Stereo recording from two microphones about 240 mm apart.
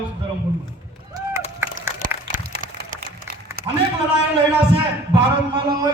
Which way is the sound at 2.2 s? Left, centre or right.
Right.